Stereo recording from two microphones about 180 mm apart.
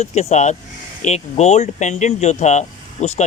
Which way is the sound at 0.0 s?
35° left (ahead or behind).